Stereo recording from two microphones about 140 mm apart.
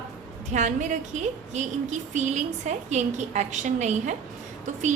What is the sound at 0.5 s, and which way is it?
A woman's voice, 60° right (ahead or behind).